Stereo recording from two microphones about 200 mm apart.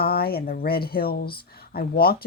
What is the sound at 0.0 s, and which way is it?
Speech, 50° left (ahead or behind).